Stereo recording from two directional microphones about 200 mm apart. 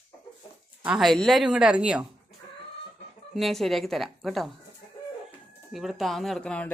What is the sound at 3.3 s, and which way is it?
Speech, centre (ahead or behind).